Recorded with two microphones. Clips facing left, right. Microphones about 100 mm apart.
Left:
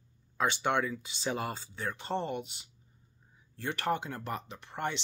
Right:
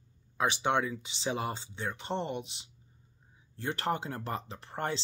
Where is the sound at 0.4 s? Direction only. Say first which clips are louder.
Right 1 dB; 20° right (ahead or behind).